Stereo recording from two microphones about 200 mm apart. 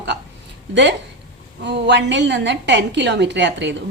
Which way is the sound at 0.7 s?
60° right (ahead or behind).